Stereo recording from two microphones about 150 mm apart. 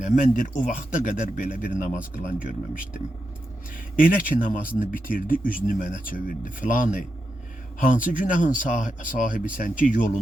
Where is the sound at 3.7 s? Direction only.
65° left (ahead or behind).